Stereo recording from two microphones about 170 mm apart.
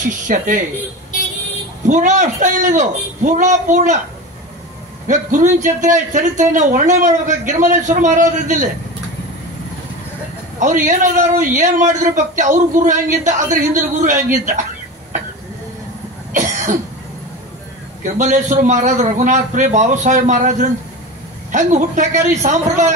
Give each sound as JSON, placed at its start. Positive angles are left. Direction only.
{"t": 0.0, "sound": "a man's voice", "side_deg": -50}
{"t": 1.9, "sound": "a man's voice", "side_deg": -45}
{"t": 5.0, "sound": "a man's voice", "side_deg": -50}
{"t": 10.6, "sound": "a man's voice", "side_deg": -50}
{"t": 18.0, "sound": "a man's voice", "side_deg": -45}